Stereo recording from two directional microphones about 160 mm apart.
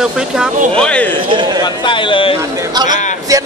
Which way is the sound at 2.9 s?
50° left (ahead or behind).